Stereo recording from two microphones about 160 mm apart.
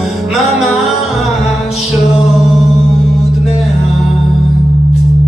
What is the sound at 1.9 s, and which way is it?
Music, centre (ahead or behind).